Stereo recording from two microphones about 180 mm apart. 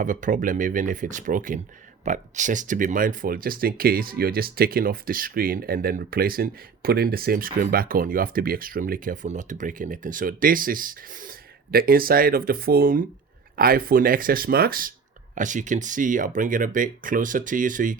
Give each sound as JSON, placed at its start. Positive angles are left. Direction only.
{"t": 0.0, "sound": "speech", "side_deg": -45}